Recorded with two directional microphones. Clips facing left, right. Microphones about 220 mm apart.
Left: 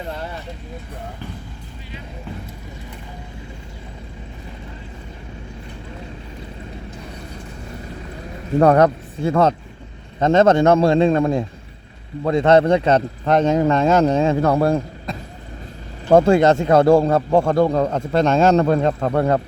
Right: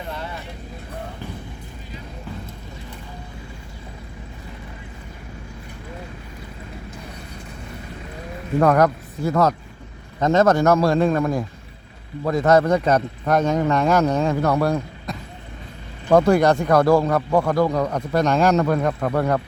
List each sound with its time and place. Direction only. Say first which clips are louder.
8.5 s speech: left 3 dB; 30° left (ahead or behind)